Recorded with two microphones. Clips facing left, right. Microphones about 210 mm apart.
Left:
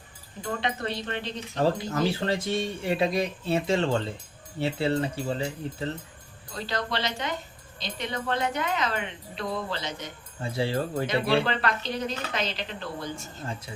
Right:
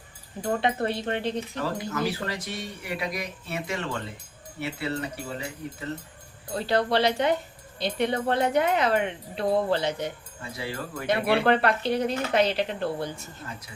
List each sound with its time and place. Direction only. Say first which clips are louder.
0.4 s speech: right 5 dB; 50° right (ahead or behind)
1.6 s speech: left 5 dB; 25° left (ahead or behind)
6.7 s speech: right 8 dB; 60° right (ahead or behind)
10.4 s speech: left 7 dB; 30° left (ahead or behind)
11.0 s speech: right 4 dB; 60° right (ahead or behind)